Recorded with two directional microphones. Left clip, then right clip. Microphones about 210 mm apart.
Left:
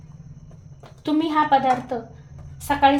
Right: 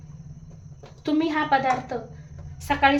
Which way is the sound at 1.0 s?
15° left (ahead or behind).